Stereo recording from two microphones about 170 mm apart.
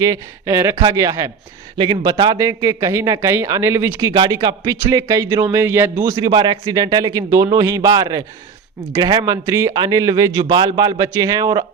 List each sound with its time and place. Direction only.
0.0 s a man's voice: 20° right (ahead or behind)
4.1 s speech: 25° right (ahead or behind)